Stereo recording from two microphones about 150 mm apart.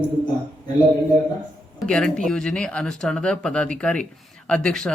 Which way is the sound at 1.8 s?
5° left (ahead or behind).